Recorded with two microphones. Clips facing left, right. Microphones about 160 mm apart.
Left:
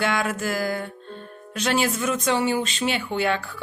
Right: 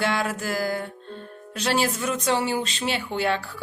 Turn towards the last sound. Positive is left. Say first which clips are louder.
# left 1 dB
turn(degrees=-35)  # may be behind; listen again after turning